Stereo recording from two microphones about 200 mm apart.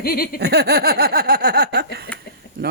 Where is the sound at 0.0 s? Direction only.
50° left (ahead or behind).